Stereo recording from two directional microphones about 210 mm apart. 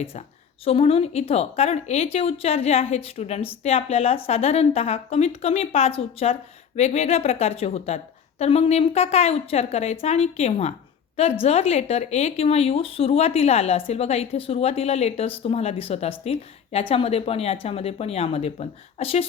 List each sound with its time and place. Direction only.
0.0 s a woman's voice: 30° left (ahead or behind)